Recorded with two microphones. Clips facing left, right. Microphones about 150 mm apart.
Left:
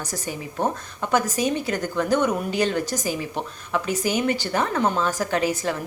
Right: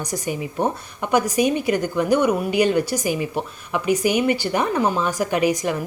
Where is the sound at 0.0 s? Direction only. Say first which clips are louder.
Right 5 dB; 15° right (ahead or behind).